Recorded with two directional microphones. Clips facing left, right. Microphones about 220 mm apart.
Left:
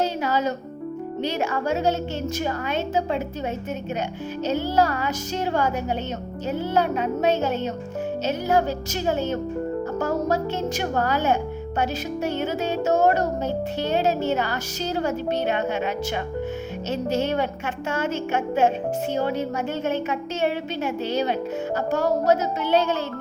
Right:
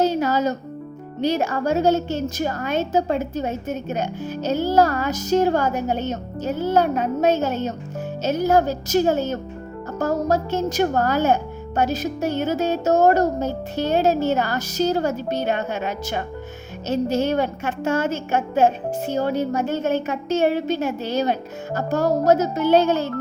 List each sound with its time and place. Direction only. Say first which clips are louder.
0.0 s speech: right 4 dB; 45° right (ahead or behind)